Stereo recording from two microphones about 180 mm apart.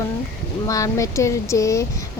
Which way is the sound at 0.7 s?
20° left (ahead or behind).